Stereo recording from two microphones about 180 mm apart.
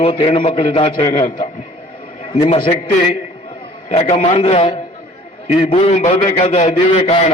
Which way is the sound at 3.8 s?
40° left (ahead or behind).